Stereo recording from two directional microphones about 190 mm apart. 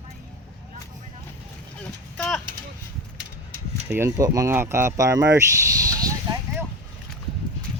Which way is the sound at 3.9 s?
15° right (ahead or behind).